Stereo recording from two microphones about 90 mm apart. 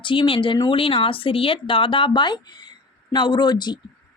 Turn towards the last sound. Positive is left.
turn(degrees=50)  # may be behind; listen again after turning